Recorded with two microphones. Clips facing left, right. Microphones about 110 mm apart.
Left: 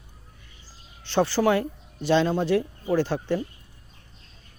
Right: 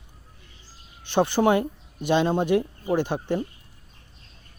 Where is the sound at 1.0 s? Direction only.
15° right (ahead or behind).